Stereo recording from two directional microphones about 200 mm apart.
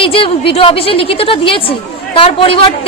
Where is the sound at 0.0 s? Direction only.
25° left (ahead or behind).